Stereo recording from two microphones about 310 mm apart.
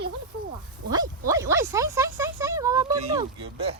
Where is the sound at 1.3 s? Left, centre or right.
Centre.